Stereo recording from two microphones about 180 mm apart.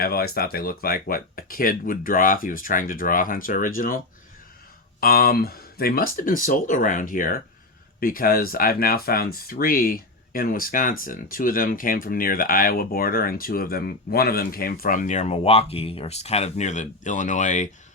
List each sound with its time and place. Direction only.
0.0 s speech: 60° left (ahead or behind); by 17.7 s 40° left (ahead or behind)